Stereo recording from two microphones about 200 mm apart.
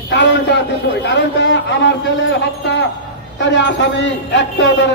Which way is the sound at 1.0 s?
65° left (ahead or behind).